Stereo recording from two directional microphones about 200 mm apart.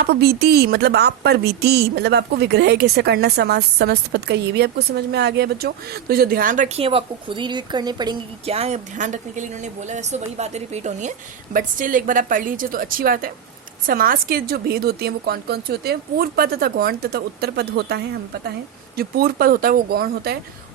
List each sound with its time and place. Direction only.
0.0 s speech: 55° right (ahead or behind)